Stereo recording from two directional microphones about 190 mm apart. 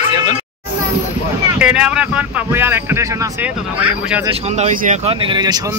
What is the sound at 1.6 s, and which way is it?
Speech, 5° right (ahead or behind).